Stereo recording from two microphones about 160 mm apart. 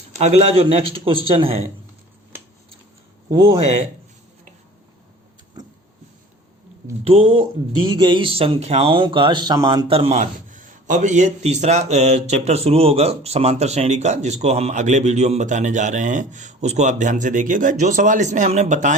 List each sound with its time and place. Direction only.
0.2 s speech: 45° right (ahead or behind)
3.2 s speech: 30° right (ahead or behind)
7.0 s speech: 35° right (ahead or behind)
9.9 s speech: 35° right (ahead or behind)
10.5 s speech: 55° right (ahead or behind)